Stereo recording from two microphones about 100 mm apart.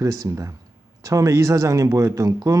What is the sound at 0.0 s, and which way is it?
Speech, 30° right (ahead or behind).